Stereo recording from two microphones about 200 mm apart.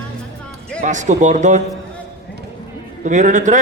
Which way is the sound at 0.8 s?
35° right (ahead or behind).